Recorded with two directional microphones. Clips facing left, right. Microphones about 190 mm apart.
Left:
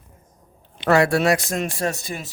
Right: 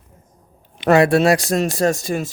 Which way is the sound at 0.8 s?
20° right (ahead or behind).